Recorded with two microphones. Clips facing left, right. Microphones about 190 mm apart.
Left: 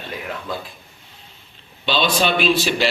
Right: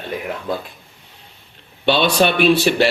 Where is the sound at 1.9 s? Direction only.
60° right (ahead or behind).